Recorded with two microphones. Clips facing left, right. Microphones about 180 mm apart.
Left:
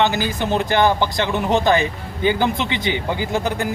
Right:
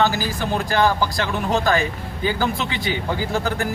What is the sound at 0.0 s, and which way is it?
A man's voice, 20° left (ahead or behind).